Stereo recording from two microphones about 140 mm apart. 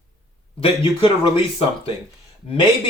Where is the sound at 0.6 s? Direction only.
40° left (ahead or behind).